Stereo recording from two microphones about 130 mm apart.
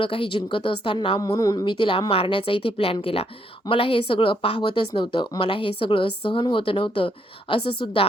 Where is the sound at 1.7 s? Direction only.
40° left (ahead or behind).